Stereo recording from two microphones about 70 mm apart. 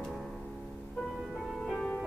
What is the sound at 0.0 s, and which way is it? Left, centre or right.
Music, centre.